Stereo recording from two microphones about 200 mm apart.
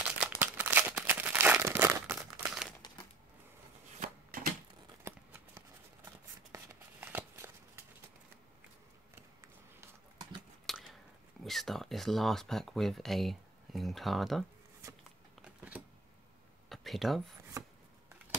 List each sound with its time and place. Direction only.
0.2 s crumpling: 10° right (ahead or behind)
4.0 s shuffling cards: 45° right (ahead or behind)
5.0 s a sound: 10° right (ahead or behind)
6.0 s shuffling cards: 10° right (ahead or behind)
9.1 s a sound: 15° right (ahead or behind)
10.7 s chewing: centre (ahead or behind)
11.4 s speech: centre (ahead or behind)
15.4 s a sound: 5° right (ahead or behind)
17.6 s rub: 15° right (ahead or behind)